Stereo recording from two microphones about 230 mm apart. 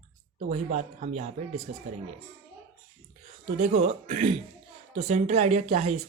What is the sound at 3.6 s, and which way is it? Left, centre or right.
Speech, right.